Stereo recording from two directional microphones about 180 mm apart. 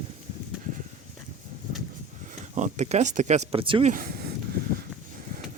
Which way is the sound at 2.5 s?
40° right (ahead or behind).